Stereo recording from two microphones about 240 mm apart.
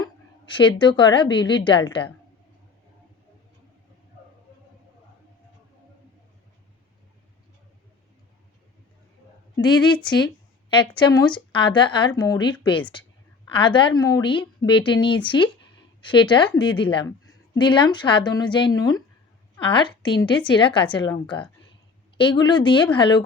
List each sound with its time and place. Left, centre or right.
0.0 s a woman's voice: centre
10.7 s a woman's voice: centre